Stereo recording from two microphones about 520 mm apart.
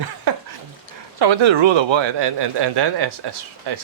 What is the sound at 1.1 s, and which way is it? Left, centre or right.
Speech, right.